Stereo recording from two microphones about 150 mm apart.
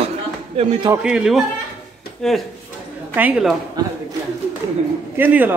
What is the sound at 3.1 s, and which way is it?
Speech, 10° right (ahead or behind).